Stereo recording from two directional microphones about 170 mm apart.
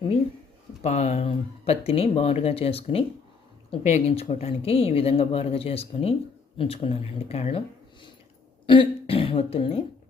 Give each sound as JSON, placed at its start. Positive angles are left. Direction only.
{"t": 0.8, "sound": "speech", "side_deg": 40}
{"t": 8.6, "sound": "speech", "side_deg": 30}